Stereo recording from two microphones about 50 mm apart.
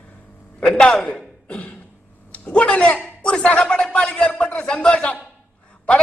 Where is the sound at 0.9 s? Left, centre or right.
Centre.